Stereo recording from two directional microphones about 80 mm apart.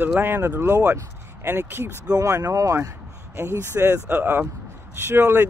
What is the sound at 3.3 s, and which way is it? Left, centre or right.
Speech, right.